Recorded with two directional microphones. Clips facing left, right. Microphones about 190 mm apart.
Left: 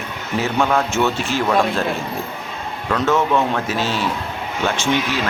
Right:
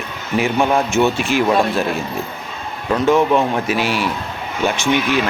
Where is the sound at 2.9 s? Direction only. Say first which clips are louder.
Right 4 dB; 15° right (ahead or behind).